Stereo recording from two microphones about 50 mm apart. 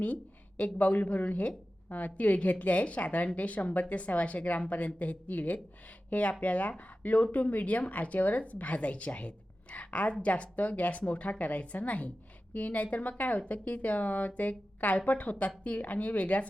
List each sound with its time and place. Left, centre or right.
0.0 s a woman's voice: left